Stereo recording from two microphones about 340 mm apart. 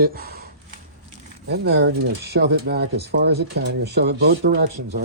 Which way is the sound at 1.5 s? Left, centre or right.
Right.